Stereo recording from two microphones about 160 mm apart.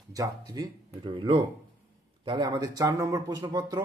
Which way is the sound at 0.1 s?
25° right (ahead or behind).